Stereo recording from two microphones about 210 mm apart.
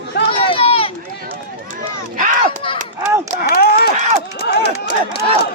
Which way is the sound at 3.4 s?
45° left (ahead or behind).